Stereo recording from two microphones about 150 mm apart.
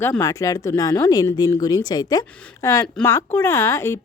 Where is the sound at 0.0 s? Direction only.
15° left (ahead or behind).